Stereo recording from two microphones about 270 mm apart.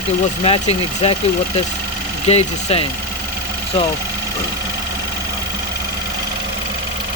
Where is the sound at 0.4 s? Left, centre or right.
Left.